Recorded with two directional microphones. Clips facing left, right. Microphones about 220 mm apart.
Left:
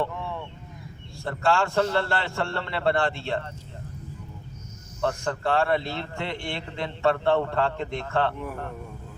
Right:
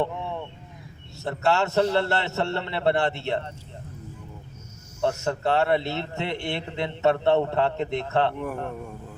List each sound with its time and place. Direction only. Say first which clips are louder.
0.0 s a sound: right 2 dB; 20° right (ahead or behind)
1.2 s a man's voice: right 1 dB; 25° right (ahead or behind)
5.2 s a man's voice: right 1 dB; 25° right (ahead or behind)